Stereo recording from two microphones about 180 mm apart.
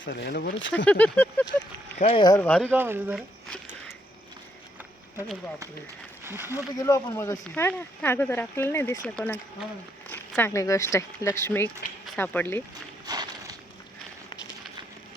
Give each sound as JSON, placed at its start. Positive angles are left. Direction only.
{"t": 0.0, "sound": "speech", "side_deg": 65}
{"t": 0.9, "sound": "speech", "side_deg": 10}
{"t": 2.0, "sound": "speech", "side_deg": 35}
{"t": 2.4, "sound": "speech", "side_deg": 5}
{"t": 2.7, "sound": "speech", "side_deg": -10}
{"t": 6.2, "sound": "speech", "side_deg": -10}
{"t": 6.7, "sound": "speech", "side_deg": 20}
{"t": 13.1, "sound": "walk", "side_deg": -20}